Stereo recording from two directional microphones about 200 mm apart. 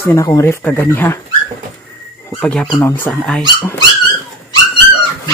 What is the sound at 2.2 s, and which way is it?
Speech, 5° left (ahead or behind).